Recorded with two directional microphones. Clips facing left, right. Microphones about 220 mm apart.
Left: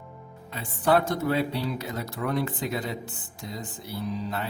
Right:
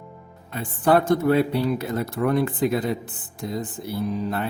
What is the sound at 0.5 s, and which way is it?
Speech, 50° right (ahead or behind).